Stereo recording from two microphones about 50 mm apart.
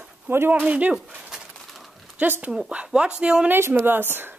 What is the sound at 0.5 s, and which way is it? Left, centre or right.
Speech, right.